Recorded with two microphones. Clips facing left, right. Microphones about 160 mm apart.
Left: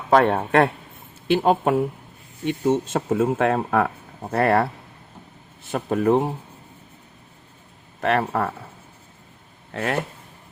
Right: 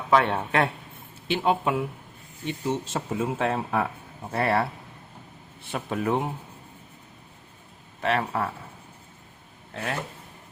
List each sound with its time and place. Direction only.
0.1 s a man's voice: 45° left (ahead or behind)
2.4 s a man's voice: 55° left (ahead or behind); by 6.2 s 40° left (ahead or behind)
8.0 s a man's voice: 50° left (ahead or behind)
9.7 s speech: 65° left (ahead or behind)